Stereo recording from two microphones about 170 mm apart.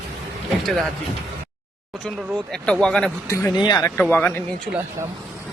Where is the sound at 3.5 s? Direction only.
25° left (ahead or behind).